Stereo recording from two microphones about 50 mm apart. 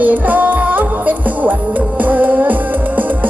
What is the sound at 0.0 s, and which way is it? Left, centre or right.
Music, right.